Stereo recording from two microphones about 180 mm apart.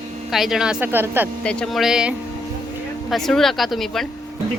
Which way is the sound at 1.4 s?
5° left (ahead or behind).